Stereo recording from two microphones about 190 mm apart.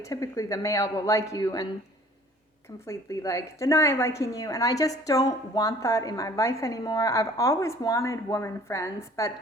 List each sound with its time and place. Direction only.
0.0 s speech: 15° left (ahead or behind)
2.8 s speech: 15° left (ahead or behind)